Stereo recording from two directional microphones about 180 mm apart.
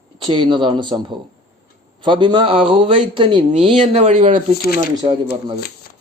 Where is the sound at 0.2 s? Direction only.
25° right (ahead or behind).